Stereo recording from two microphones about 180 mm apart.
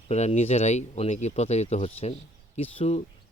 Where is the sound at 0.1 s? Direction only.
35° left (ahead or behind).